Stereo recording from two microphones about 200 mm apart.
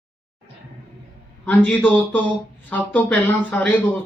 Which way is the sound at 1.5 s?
5° left (ahead or behind).